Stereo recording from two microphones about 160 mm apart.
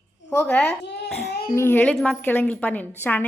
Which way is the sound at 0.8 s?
90° left.